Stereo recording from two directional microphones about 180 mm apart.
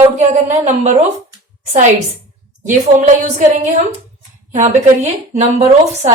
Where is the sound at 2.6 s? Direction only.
45° right (ahead or behind).